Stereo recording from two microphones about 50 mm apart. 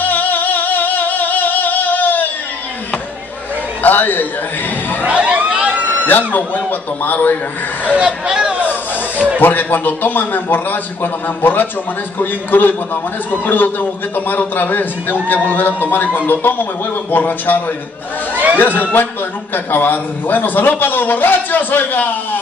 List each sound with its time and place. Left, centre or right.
0.0 s music: left
3.8 s a man's voice: left
5.0 s a sound: right
6.0 s a man's voice: left
7.9 s speech: centre
9.4 s a man's voice: left
18.3 s a sound: right
18.8 s a man's voice: left